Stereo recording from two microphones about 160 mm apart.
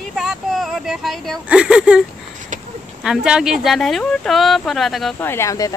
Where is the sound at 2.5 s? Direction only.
55° right (ahead or behind).